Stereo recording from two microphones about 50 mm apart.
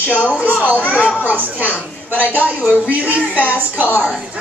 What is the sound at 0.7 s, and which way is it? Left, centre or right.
Speech, right.